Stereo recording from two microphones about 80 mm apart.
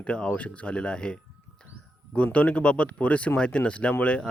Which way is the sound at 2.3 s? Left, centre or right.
Centre.